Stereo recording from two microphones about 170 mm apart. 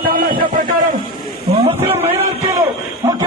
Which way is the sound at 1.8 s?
15° right (ahead or behind).